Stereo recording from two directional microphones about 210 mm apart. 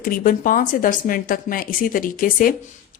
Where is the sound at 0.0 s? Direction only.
40° left (ahead or behind).